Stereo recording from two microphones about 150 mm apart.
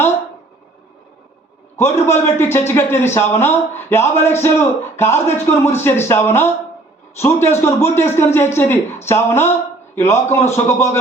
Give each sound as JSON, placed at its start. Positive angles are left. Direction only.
{"t": 1.7, "sound": "a man's voice", "side_deg": 15}